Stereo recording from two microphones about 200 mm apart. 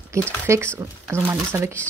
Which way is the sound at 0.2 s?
15° right (ahead or behind).